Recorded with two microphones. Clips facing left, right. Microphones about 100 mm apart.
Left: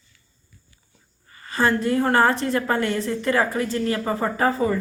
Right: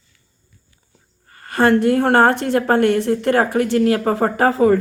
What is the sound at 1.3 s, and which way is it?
A woman's voice, 60° right (ahead or behind).